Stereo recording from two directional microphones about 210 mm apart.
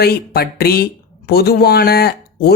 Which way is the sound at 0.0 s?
50° left (ahead or behind).